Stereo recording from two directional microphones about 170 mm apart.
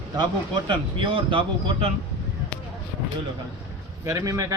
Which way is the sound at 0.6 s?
30° right (ahead or behind).